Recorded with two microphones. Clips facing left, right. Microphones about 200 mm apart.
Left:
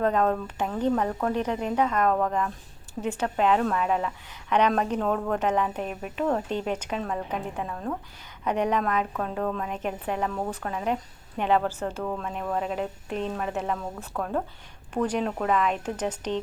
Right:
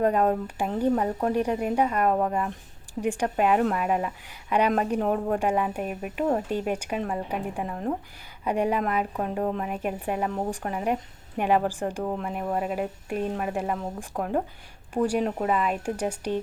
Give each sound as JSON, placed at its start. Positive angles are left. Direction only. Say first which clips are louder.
{"t": 0.0, "sound": "a woman's voice", "louder": "right 1 dB", "side_deg": -15}
{"t": 8.4, "sound": "a woman's voice", "louder": "even", "side_deg": -10}
{"t": 9.6, "sound": "a woman's voice", "louder": "right 1 dB", "side_deg": -10}